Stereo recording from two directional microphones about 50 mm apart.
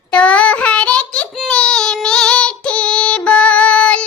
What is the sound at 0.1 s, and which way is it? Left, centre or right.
Child singing, left.